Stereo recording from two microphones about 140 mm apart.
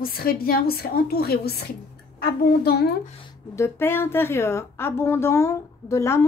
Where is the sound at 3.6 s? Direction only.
15° left (ahead or behind).